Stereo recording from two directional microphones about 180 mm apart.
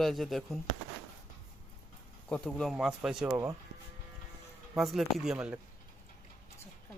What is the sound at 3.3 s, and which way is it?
Speech, 15° right (ahead or behind).